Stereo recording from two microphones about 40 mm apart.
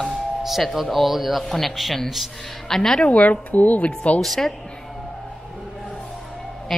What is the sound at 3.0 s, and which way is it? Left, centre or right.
Speech, left.